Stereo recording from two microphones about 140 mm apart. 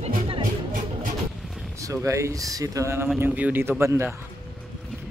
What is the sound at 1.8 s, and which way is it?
Speech, 20° right (ahead or behind).